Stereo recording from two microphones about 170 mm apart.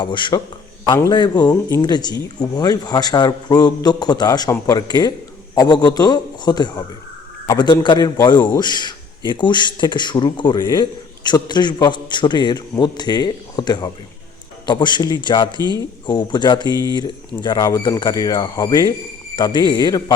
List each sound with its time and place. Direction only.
0.0 s a man's voice: 30° left (ahead or behind)